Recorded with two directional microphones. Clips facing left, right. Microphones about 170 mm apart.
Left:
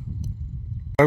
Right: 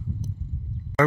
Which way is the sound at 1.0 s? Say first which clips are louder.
Left 4 dB; 20° left (ahead or behind).